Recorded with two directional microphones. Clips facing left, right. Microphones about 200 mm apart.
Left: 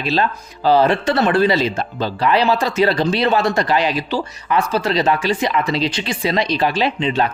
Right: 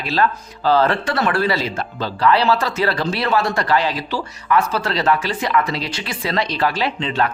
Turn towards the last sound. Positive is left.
turn(degrees=20)  # may be behind; listen again after turning